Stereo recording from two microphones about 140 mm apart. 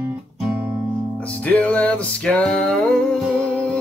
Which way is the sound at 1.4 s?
10° left (ahead or behind).